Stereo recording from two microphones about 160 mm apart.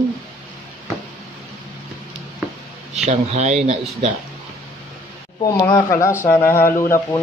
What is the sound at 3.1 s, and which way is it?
Speech, 45° right (ahead or behind).